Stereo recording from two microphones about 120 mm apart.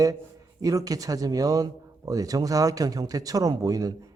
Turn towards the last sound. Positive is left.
turn(degrees=-30)  # may be behind; listen again after turning